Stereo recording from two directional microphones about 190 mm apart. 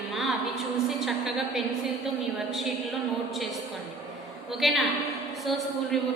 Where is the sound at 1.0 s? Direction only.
Centre (ahead or behind).